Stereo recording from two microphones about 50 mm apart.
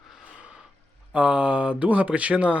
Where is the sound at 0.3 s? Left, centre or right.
Right.